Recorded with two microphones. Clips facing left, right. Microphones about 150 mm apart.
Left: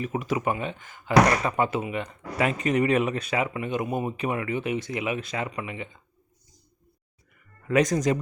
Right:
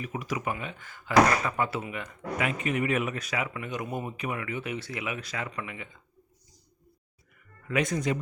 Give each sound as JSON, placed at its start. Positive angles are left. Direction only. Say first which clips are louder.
{"t": 0.0, "sound": "speech", "louder": "left 6 dB", "side_deg": 30}
{"t": 7.7, "sound": "speech", "louder": "left 6 dB", "side_deg": 40}